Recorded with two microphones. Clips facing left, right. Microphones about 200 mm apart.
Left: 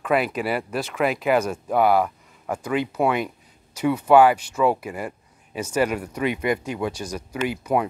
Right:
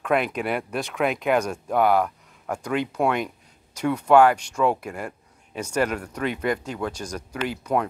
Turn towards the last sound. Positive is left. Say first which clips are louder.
# left 2 dB
turn(degrees=10)  # may be behind; listen again after turning